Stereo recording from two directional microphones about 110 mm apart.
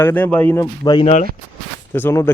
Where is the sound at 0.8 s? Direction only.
40° left (ahead or behind).